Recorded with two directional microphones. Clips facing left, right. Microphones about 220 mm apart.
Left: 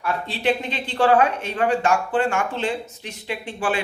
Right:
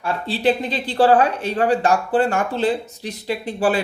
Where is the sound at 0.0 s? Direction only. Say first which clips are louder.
Right 4 dB; 35° right (ahead or behind).